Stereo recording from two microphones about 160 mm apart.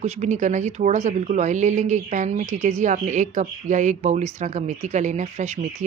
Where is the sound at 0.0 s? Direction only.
45° right (ahead or behind).